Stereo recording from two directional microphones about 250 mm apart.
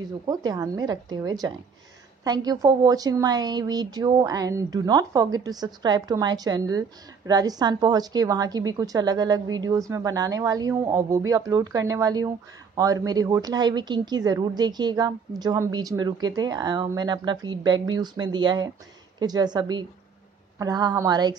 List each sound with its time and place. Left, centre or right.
0.3 s a woman's voice: centre